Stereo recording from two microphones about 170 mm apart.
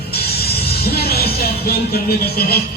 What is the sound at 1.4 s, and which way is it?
Music, 65° left (ahead or behind).